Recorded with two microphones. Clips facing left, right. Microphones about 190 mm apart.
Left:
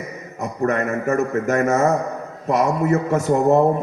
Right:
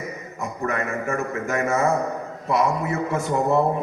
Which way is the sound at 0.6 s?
40° left (ahead or behind).